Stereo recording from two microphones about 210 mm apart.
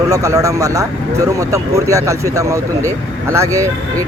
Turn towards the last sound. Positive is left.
turn(degrees=-15)  # may be behind; listen again after turning